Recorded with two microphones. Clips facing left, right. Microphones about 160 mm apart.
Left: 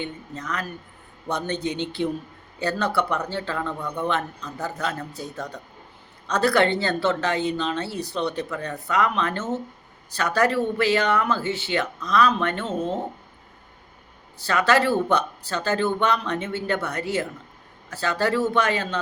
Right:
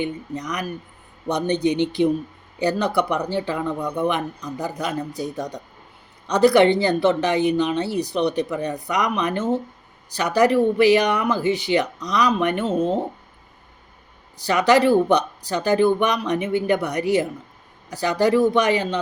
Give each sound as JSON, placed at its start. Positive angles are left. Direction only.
{"t": 0.0, "sound": "speech", "side_deg": -15}
{"t": 14.3, "sound": "speech", "side_deg": -15}